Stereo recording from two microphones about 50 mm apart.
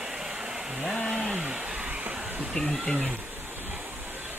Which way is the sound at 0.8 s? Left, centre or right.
Centre.